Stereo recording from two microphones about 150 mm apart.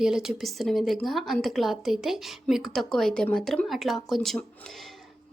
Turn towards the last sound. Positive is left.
turn(degrees=0)  # may be behind; listen again after turning